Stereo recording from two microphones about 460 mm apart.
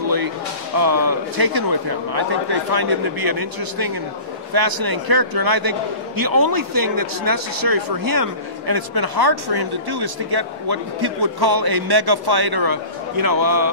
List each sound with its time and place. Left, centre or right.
0.0 s music: right
0.7 s a man's voice: right